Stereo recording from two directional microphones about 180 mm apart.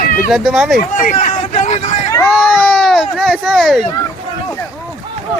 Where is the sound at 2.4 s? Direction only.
5° left (ahead or behind).